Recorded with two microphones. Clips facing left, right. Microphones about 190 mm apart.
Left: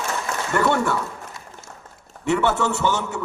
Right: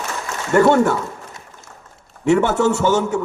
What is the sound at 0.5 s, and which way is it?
Speech, 45° right (ahead or behind).